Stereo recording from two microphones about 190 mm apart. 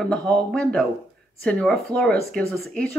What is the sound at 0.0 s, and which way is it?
Speech, 5° left (ahead or behind).